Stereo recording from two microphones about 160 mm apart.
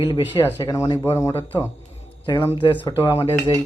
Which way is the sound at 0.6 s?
20° left (ahead or behind).